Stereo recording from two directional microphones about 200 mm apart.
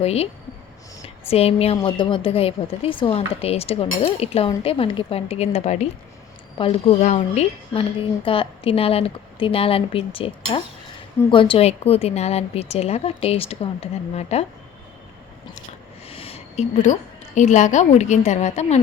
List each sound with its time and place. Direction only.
0.0 s a woman's voice: 30° left (ahead or behind)
16.0 s a woman's voice: 30° left (ahead or behind)